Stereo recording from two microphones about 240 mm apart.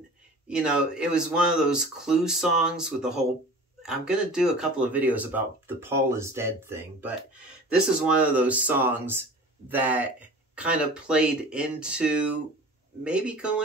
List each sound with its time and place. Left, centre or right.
0.5 s speech: centre